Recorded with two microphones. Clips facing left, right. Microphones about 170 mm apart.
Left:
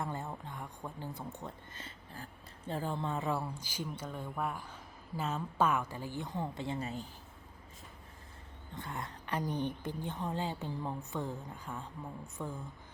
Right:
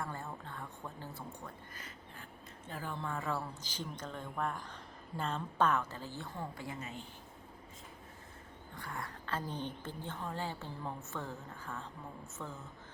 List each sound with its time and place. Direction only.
0.0 s speech: 20° left (ahead or behind); by 7.1 s 35° left (ahead or behind)
8.7 s speech: 20° left (ahead or behind)